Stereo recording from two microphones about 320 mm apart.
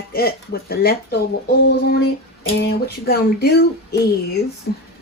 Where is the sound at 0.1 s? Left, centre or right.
Left.